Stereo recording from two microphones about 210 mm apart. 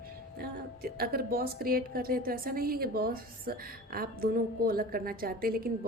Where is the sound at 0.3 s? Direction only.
50° right (ahead or behind).